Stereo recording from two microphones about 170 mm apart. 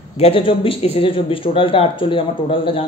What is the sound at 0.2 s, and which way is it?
Speech, 30° left (ahead or behind).